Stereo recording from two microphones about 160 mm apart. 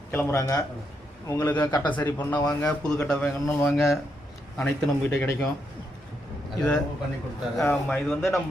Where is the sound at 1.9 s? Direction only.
10° left (ahead or behind).